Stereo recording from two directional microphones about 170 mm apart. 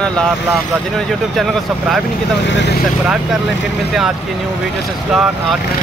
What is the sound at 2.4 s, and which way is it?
Speech, 90° left.